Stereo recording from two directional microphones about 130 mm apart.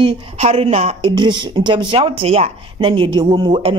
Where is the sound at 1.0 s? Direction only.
35° right (ahead or behind).